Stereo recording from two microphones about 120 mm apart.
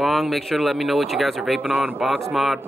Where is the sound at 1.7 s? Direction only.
15° right (ahead or behind).